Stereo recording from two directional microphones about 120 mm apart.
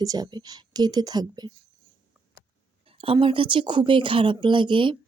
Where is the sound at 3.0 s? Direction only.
50° right (ahead or behind).